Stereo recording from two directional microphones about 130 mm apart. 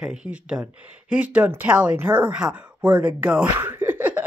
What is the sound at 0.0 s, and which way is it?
A woman's voice, 5° right (ahead or behind).